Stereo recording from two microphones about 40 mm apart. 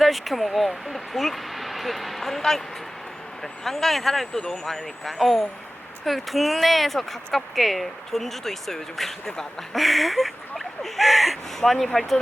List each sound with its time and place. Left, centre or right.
0.0 s a woman's voice: centre